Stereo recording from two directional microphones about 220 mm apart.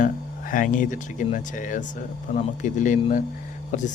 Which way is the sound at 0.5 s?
35° left (ahead or behind).